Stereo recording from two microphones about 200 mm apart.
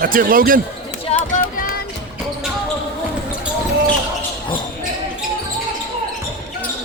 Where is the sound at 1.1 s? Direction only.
45° left (ahead or behind).